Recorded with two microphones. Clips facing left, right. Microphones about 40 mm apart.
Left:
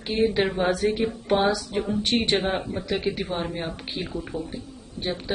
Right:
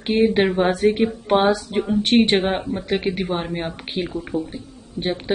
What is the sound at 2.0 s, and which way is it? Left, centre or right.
Speech, right.